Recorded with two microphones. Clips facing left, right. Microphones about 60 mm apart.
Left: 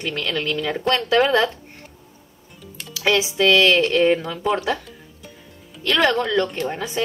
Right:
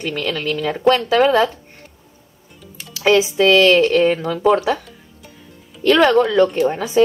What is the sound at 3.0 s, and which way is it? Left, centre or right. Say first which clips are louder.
Speech: right 4 dB; centre.